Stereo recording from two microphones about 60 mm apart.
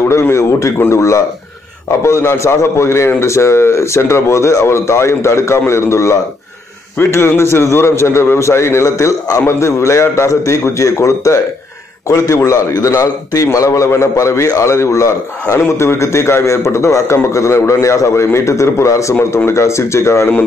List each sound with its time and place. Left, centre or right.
0.1 s a man's voice: left
7.2 s a man's voice: left
8.8 s a man's voice: left
9.5 s a man's voice: left
12.4 s a man's voice: left
15.8 s a man's voice: left